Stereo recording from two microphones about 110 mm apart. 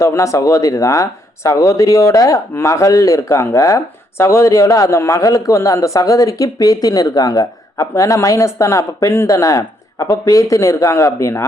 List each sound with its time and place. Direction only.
0.0 s speech: 25° left (ahead or behind)